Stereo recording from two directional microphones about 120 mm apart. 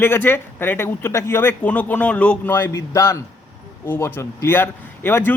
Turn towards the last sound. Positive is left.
turn(degrees=20)  # may be behind; listen again after turning